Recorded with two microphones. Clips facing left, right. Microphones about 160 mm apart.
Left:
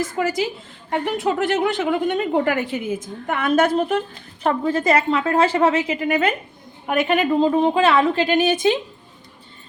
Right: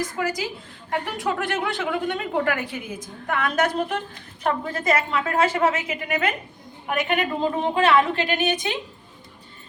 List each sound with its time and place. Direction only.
0.2 s a woman's voice: 25° left (ahead or behind)